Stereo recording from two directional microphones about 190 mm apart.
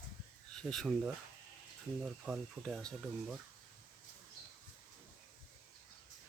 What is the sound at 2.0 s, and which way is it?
Speech, 5° right (ahead or behind).